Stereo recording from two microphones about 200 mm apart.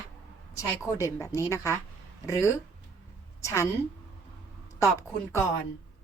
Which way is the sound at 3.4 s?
15° left (ahead or behind).